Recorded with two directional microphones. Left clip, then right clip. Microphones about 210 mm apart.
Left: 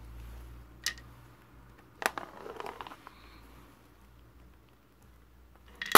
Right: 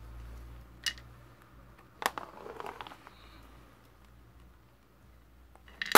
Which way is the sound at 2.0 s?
15° left (ahead or behind).